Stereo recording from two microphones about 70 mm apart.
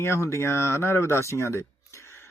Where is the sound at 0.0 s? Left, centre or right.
Left.